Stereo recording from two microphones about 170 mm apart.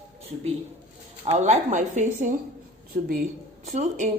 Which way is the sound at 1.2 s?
40° right (ahead or behind).